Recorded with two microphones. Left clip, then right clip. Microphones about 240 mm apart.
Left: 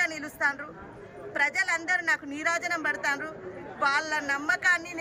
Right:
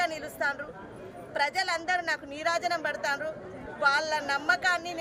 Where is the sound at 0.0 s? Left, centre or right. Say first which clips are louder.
Left 2 dB; centre.